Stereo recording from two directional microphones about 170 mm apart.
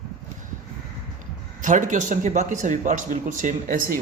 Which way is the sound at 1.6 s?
50° right (ahead or behind).